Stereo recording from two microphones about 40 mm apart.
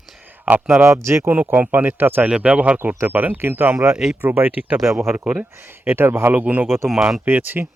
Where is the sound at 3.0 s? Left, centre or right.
Right.